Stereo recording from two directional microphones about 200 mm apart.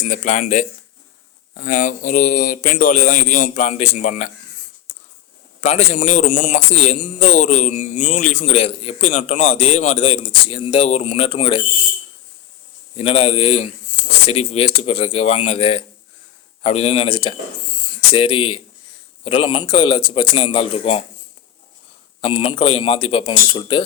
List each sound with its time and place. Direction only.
0.0 s a man's voice: 40° left (ahead or behind)
5.5 s a man's voice: 35° left (ahead or behind)
13.0 s a man's voice: 30° left (ahead or behind)
22.2 s a man's voice: 30° left (ahead or behind)